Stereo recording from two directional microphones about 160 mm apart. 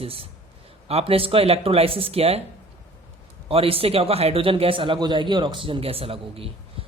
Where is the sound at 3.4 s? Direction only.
35° right (ahead or behind).